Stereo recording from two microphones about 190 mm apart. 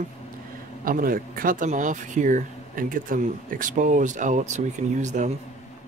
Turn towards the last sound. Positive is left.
turn(degrees=-40)  # may be behind; listen again after turning